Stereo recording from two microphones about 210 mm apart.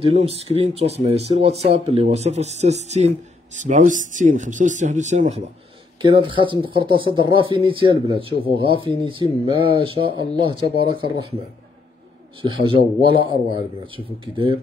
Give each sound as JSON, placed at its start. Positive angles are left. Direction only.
{"t": 0.0, "sound": "speech", "side_deg": -25}
{"t": 12.4, "sound": "speech", "side_deg": -25}